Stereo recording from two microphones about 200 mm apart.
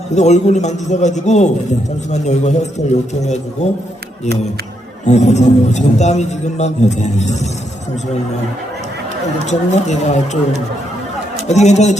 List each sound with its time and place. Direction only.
0.1 s a man's voice: 35° left (ahead or behind)
5.0 s a man's voice: 35° left (ahead or behind)
9.5 s a man's voice: 35° left (ahead or behind)
11.4 s a man's voice: 35° left (ahead or behind)